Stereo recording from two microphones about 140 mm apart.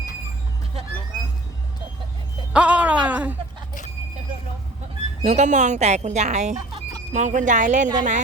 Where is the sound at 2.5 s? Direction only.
10° right (ahead or behind).